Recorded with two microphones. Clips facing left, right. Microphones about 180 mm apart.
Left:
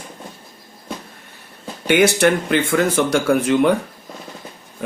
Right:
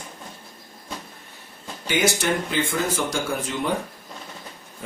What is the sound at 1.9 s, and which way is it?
Speech, 65° left (ahead or behind).